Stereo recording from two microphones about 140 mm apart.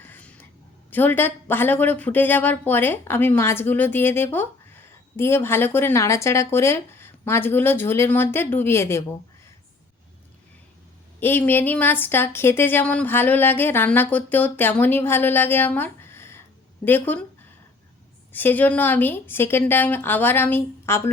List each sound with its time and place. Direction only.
0.0 s a sound: 15° left (ahead or behind)
0.9 s speech: 15° left (ahead or behind)
11.2 s speech: 15° left (ahead or behind)
18.3 s speech: 15° left (ahead or behind)